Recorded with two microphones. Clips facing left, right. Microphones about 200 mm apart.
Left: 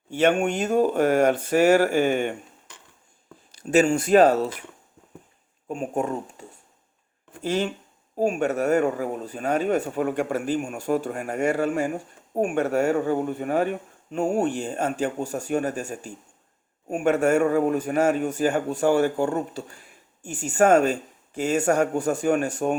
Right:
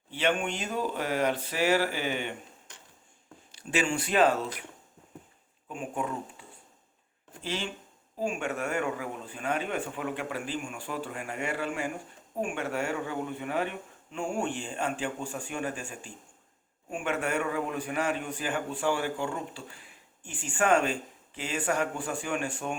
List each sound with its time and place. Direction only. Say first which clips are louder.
0.1 s a man's voice: left 8 dB; 45° left (ahead or behind)
5.6 s a man's voice: left 7 dB; 40° left (ahead or behind)
7.4 s a man's voice: left 10 dB; 45° left (ahead or behind)